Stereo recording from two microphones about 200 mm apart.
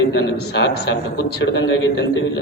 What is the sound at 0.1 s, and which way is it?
A man's voice, 60° left (ahead or behind).